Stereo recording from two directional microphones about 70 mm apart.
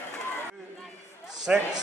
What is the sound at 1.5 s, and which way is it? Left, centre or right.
Speech, centre.